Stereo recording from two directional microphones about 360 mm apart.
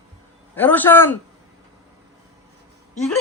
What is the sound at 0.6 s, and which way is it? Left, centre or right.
Speech, centre.